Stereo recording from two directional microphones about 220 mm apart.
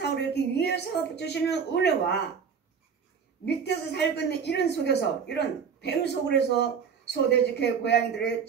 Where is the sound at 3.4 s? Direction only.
50° left (ahead or behind).